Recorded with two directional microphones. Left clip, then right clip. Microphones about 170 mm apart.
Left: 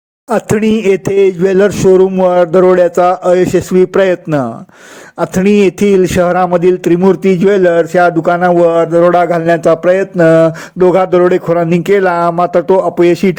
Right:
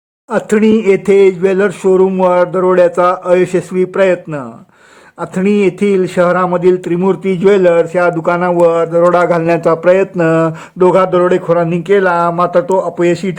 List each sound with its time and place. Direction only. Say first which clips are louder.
0.3 s a man's voice: even; 30° left (ahead or behind)